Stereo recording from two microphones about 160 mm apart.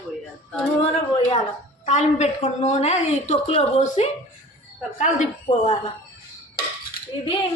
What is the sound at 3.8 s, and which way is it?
A woman's voice, 50° left (ahead or behind).